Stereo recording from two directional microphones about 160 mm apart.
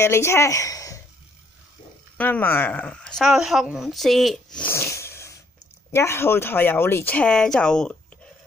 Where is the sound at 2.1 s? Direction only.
10° left (ahead or behind).